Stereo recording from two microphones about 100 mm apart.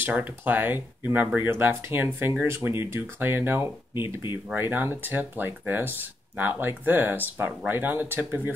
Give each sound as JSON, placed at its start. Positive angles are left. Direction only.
{"t": 0.0, "sound": "speech", "side_deg": -15}